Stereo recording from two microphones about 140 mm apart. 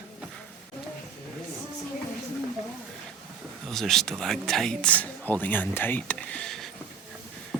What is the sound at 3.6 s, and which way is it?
Speech, centre (ahead or behind).